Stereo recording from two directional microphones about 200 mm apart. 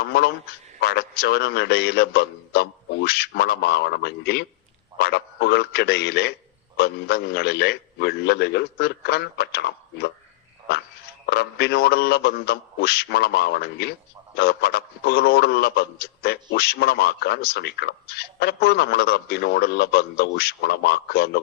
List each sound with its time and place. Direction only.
0.0 s a sound: 55° left (ahead or behind)
0.8 s a man's voice: 55° left (ahead or behind)
11.3 s a man's voice: 55° left (ahead or behind)